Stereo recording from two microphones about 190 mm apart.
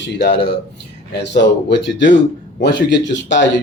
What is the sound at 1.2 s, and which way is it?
A man's voice, 65° left (ahead or behind).